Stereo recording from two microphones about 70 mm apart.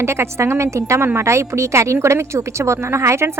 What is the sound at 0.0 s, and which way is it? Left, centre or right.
A woman's voice, right.